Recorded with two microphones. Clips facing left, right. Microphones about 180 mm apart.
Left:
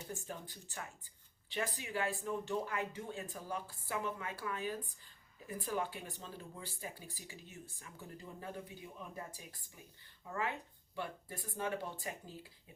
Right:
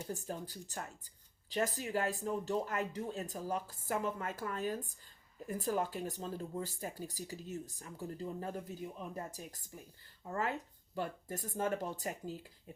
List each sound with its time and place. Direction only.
0.1 s speech: 40° right (ahead or behind)